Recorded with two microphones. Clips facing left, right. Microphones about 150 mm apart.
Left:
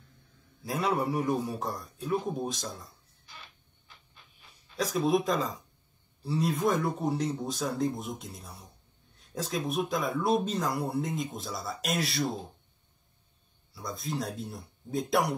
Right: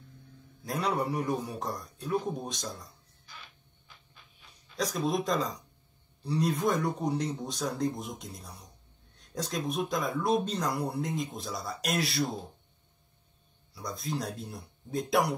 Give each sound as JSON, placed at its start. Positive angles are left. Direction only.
{"t": 0.7, "sound": "speech", "side_deg": 0}
{"t": 4.7, "sound": "speech", "side_deg": 0}
{"t": 13.7, "sound": "speech", "side_deg": 0}